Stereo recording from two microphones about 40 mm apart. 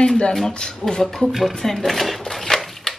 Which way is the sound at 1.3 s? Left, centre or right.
Centre.